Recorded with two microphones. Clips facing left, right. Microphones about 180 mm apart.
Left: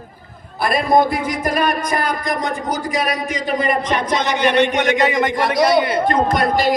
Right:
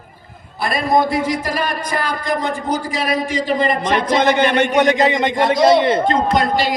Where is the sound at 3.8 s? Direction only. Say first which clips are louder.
Right 4 dB; 55° right (ahead or behind).